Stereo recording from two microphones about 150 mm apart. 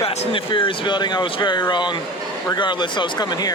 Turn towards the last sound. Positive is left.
turn(degrees=25)  # may be behind; listen again after turning